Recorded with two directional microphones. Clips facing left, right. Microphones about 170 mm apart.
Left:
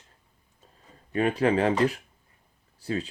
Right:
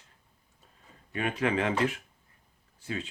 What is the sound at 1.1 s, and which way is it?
Speech, 35° left (ahead or behind).